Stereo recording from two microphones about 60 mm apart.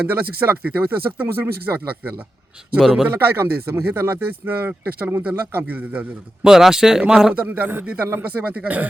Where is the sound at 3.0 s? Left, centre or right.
Right.